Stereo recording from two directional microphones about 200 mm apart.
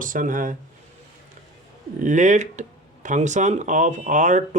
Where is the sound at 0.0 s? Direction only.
40° right (ahead or behind).